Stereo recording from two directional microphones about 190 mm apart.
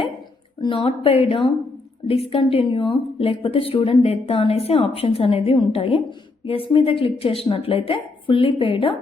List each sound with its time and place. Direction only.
0.6 s a woman's voice: 30° left (ahead or behind)